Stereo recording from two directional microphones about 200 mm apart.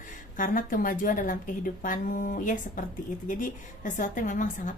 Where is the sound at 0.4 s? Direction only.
45° left (ahead or behind).